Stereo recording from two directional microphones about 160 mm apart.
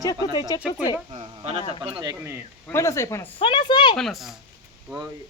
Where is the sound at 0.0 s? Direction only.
20° left (ahead or behind).